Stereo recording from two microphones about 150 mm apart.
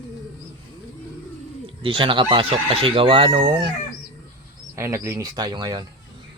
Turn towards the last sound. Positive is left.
turn(degrees=-25)  # may be behind; listen again after turning